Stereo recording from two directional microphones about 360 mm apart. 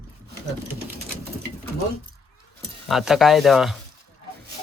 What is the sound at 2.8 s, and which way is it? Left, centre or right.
Speech, centre.